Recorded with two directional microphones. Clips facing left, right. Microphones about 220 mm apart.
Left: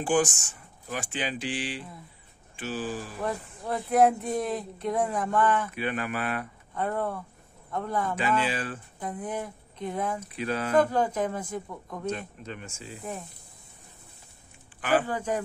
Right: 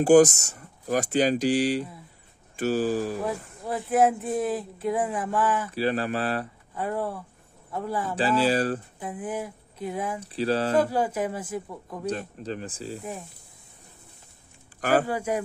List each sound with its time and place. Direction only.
0.0 s speech: 40° right (ahead or behind)
3.3 s speech: 5° right (ahead or behind)
5.7 s speech: 35° right (ahead or behind)
6.7 s speech: 5° right (ahead or behind)
8.2 s speech: 35° right (ahead or behind)
9.0 s speech: 5° right (ahead or behind)
10.2 s speech: 30° right (ahead or behind)
10.8 s speech: 10° right (ahead or behind)
12.1 s speech: 35° right (ahead or behind)
15.0 s speech: 10° right (ahead or behind)